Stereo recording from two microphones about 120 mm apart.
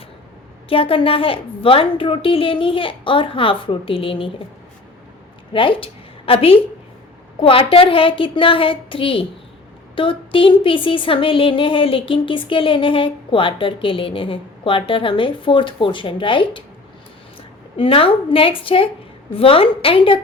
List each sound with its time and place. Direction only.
0.7 s a woman's voice: 50° left (ahead or behind)
5.5 s a woman's voice: 45° left (ahead or behind)
17.7 s a woman's voice: 50° left (ahead or behind)